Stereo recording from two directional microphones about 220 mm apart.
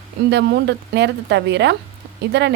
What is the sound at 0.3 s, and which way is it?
A woman's voice, 50° right (ahead or behind).